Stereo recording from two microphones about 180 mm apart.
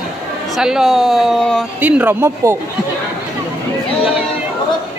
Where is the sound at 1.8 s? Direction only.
10° right (ahead or behind).